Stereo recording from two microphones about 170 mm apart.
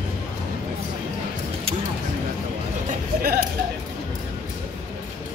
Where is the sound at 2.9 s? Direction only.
60° right (ahead or behind).